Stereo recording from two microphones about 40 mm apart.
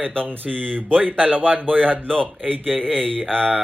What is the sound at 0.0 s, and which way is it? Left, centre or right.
Speech, left.